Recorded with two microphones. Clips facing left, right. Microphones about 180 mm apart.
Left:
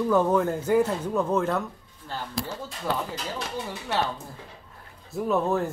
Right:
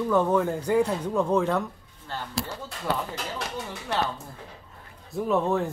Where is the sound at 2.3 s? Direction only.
65° right (ahead or behind).